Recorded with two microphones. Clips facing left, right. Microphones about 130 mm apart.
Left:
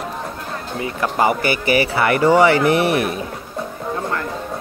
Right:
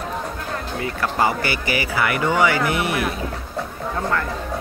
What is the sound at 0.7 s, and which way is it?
Speech, 20° left (ahead or behind).